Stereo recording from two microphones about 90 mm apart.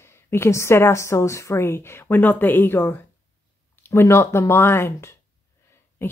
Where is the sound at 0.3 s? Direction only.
30° left (ahead or behind).